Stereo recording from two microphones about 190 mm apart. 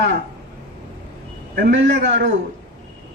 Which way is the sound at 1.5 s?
60° right (ahead or behind).